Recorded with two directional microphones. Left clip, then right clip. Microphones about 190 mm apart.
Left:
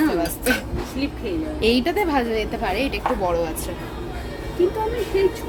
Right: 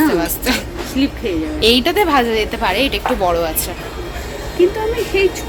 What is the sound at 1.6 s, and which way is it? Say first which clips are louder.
A woman's voice: right 7 dB; 5° right (ahead or behind).